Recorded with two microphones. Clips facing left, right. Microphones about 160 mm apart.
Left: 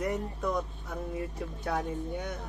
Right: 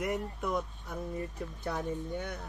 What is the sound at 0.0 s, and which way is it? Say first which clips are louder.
Speech: left 2 dB; 5° right (ahead or behind).